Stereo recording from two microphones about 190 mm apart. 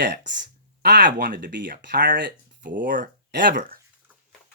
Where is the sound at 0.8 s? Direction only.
55° right (ahead or behind).